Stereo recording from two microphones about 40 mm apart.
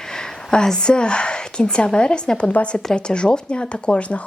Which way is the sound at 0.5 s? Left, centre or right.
Centre.